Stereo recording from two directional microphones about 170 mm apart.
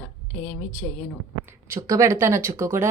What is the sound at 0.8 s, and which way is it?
Speech, 10° left (ahead or behind).